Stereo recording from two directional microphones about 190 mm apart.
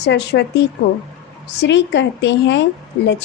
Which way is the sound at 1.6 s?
70° left (ahead or behind).